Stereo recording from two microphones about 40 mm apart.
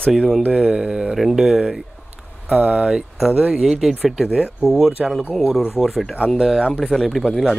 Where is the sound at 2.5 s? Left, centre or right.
Right; by 6.2 s centre.